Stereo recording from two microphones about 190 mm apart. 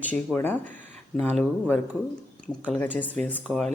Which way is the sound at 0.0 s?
10° left (ahead or behind).